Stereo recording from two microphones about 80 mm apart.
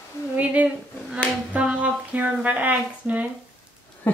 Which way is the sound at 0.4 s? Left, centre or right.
Centre.